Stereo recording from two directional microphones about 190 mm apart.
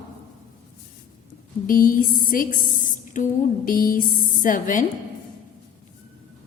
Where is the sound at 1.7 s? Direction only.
45° left (ahead or behind).